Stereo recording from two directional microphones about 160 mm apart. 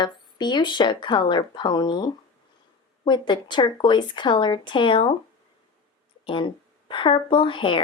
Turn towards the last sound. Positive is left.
turn(degrees=30)  # may be behind; listen again after turning